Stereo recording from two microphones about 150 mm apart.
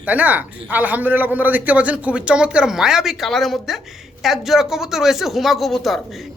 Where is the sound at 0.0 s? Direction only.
10° right (ahead or behind).